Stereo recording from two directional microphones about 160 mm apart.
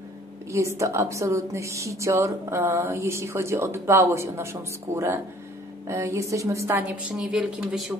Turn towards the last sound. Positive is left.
turn(degrees=-5)  # may be behind; listen again after turning